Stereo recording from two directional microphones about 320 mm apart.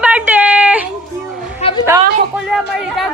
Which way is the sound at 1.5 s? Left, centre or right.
Centre.